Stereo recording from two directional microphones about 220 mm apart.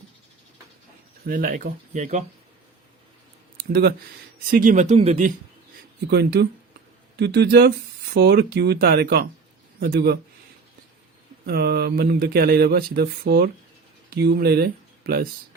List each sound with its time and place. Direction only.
1.2 s speech: 40° right (ahead or behind)
3.6 s speech: 45° right (ahead or behind)
4.5 s speech: 35° right (ahead or behind)
6.1 s speech: 50° right (ahead or behind)
11.4 s speech: 45° right (ahead or behind)